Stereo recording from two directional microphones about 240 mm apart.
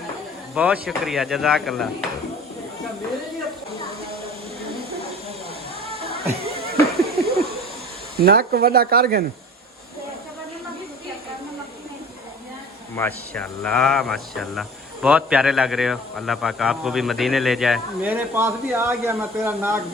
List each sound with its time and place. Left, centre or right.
0.5 s speech: centre
7.0 s a sound: right
8.1 s speech: right
13.0 s speech: centre